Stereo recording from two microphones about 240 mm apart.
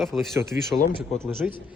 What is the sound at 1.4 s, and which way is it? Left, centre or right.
Speech, centre.